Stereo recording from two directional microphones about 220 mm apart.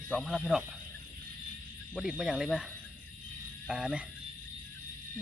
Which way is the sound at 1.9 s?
Centre (ahead or behind).